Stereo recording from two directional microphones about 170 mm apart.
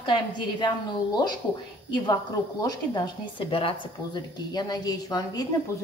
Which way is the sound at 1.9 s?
25° left (ahead or behind).